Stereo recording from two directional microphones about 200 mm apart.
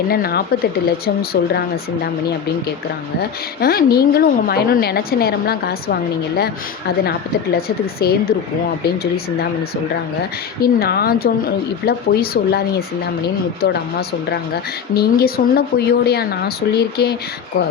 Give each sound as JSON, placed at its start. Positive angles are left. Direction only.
{"t": 0.1, "sound": "a woman's voice", "side_deg": 50}
{"t": 3.6, "sound": "a woman's voice", "side_deg": 50}
{"t": 10.6, "sound": "a woman's voice", "side_deg": 50}
{"t": 14.9, "sound": "a woman's voice", "side_deg": 50}